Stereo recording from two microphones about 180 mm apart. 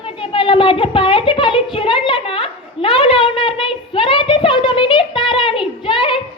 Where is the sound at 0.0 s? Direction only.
30° left (ahead or behind).